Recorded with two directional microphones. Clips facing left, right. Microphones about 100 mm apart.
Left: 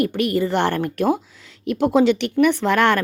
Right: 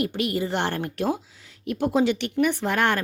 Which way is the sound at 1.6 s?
70° left (ahead or behind).